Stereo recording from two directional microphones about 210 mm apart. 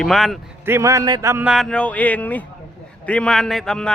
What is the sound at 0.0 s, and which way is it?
Speech, centre (ahead or behind).